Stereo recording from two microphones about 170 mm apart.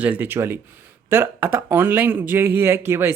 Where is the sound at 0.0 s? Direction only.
10° right (ahead or behind).